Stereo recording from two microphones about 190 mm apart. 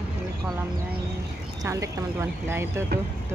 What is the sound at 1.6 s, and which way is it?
Speech, 15° right (ahead or behind).